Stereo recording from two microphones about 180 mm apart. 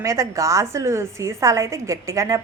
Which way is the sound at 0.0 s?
15° right (ahead or behind).